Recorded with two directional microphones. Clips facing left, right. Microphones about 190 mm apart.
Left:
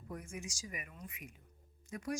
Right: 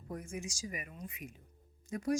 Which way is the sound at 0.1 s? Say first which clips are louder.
Right 4 dB; 35° right (ahead or behind).